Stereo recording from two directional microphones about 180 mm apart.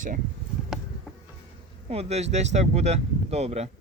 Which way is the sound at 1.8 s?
35° right (ahead or behind).